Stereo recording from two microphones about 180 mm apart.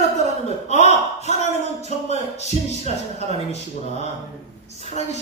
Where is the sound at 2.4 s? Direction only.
35° left (ahead or behind).